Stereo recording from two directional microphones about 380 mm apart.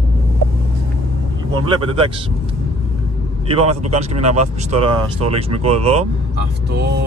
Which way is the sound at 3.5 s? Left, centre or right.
Centre.